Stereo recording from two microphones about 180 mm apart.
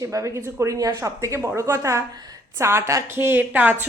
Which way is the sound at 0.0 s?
15° right (ahead or behind).